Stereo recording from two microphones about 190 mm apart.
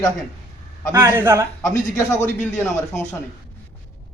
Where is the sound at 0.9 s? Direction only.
10° right (ahead or behind).